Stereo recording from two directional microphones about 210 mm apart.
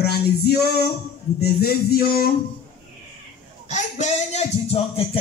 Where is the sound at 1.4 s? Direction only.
50° left (ahead or behind).